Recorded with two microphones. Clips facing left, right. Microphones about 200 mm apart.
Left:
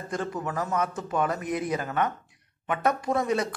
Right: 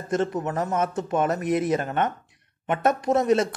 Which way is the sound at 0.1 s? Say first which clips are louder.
Right 6 dB; 20° right (ahead or behind).